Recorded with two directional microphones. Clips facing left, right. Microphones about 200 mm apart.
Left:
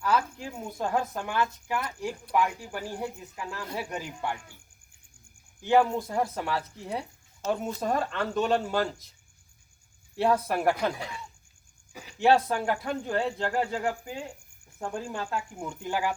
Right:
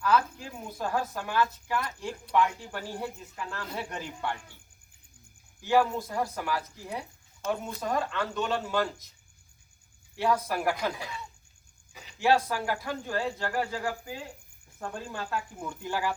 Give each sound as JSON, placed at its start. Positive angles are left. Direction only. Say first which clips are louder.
{"t": 0.0, "sound": "speech", "louder": "right 1 dB", "side_deg": 20}
{"t": 5.6, "sound": "speech", "louder": "left 2 dB", "side_deg": 20}
{"t": 10.2, "sound": "speech", "louder": "left 3 dB", "side_deg": 30}
{"t": 12.2, "sound": "speech", "louder": "left 3 dB", "side_deg": 25}